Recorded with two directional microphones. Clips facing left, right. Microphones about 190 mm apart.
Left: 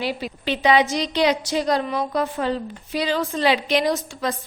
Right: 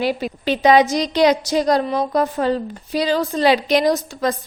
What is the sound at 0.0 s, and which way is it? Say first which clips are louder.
A woman's voice: right 5 dB; 50° right (ahead or behind).